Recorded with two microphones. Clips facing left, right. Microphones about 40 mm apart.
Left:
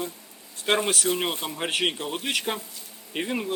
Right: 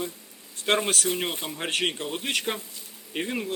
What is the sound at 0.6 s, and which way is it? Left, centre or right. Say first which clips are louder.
Speech: left 1 dB; centre.